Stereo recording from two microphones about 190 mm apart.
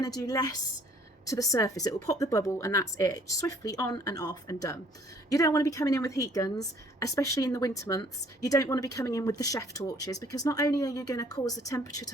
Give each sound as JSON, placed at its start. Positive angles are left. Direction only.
{"t": 0.0, "sound": "a woman's voice", "side_deg": 20}